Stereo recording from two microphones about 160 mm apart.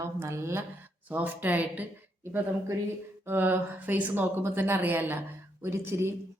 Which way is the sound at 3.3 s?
10° right (ahead or behind).